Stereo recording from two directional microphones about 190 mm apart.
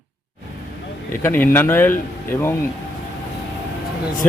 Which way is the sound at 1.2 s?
10° left (ahead or behind).